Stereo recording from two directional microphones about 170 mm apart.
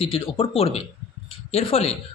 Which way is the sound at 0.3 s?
35° left (ahead or behind).